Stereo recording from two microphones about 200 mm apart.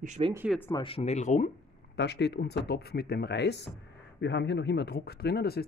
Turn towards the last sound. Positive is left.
turn(degrees=50)  # may be behind; listen again after turning